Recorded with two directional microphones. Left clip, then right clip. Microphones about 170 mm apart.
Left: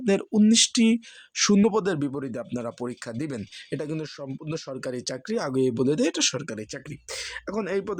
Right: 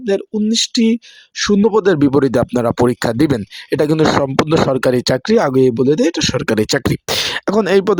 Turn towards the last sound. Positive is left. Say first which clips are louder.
# right 15 dB
turn(degrees=-55)  # may be behind; listen again after turning